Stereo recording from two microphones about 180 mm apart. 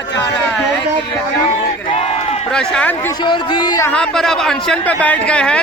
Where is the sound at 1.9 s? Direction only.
35° left (ahead or behind).